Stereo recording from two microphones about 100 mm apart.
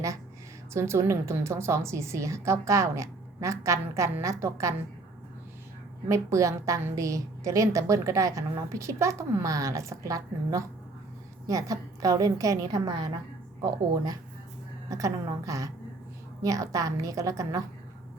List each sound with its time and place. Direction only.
0.7 s a woman's voice: 25° right (ahead or behind)
6.1 s a woman's voice: 30° right (ahead or behind)